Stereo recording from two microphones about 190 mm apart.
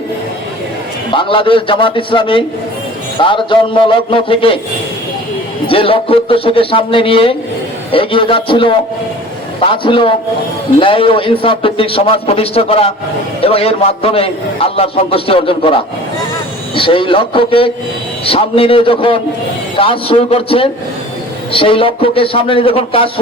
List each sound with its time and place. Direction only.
1.1 s a man's voice: 25° left (ahead or behind)
5.6 s a man's voice: 30° left (ahead or behind)
9.8 s a man's voice: 25° left (ahead or behind)